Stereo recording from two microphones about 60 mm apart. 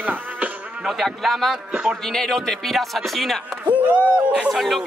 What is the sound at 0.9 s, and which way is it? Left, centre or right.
Speech, centre.